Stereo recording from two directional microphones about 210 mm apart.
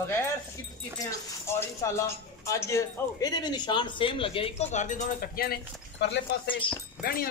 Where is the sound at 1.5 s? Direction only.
15° left (ahead or behind).